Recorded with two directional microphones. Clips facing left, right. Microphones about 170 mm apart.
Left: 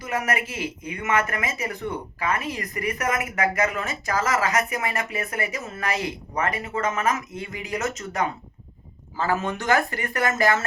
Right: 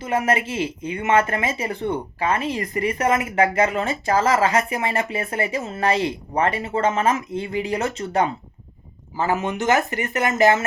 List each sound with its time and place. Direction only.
0.0 s speech: 25° right (ahead or behind)
9.1 s speech: 20° right (ahead or behind)